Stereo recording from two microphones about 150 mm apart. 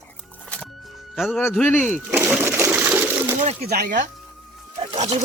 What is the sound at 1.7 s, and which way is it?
Speech, 10° left (ahead or behind).